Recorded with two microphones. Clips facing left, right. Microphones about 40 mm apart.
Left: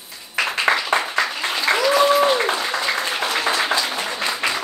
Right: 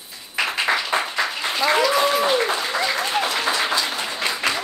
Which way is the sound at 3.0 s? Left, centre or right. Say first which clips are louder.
Right 1 dB; right.